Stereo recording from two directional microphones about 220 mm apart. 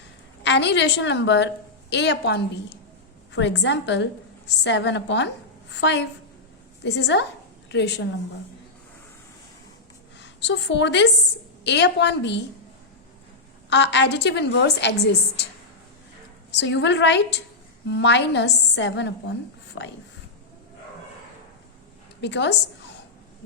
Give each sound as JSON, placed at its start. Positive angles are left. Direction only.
{"t": 0.4, "sound": "a woman's voice", "side_deg": 55}
{"t": 10.2, "sound": "a woman's voice", "side_deg": 55}
{"t": 13.7, "sound": "a woman's voice", "side_deg": 50}
{"t": 16.5, "sound": "a woman's voice", "side_deg": 50}
{"t": 22.2, "sound": "a woman's voice", "side_deg": 50}